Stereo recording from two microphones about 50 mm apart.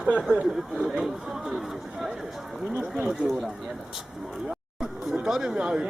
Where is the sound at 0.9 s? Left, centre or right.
Centre.